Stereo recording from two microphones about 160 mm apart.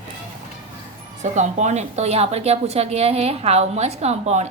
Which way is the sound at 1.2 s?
45° right (ahead or behind).